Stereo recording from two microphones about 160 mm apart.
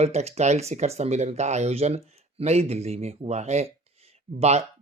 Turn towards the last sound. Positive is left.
turn(degrees=-45)  # may be behind; listen again after turning